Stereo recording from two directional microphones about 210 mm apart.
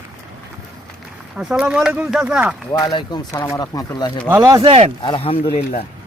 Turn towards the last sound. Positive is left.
turn(degrees=30)  # may be behind; listen again after turning